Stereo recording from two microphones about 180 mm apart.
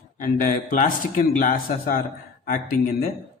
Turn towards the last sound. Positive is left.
turn(degrees=55)  # may be behind; listen again after turning